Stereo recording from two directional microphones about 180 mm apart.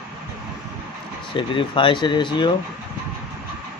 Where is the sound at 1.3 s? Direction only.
30° left (ahead or behind).